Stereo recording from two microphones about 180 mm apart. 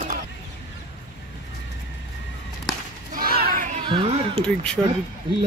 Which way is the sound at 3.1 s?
55° right (ahead or behind).